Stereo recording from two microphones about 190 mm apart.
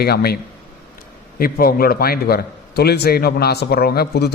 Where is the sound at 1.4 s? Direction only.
50° left (ahead or behind).